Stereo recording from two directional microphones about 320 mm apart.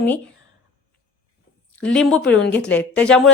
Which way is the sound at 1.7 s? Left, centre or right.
Centre.